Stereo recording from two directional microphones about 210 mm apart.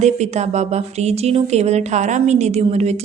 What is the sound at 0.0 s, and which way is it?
Speech, 30° right (ahead or behind).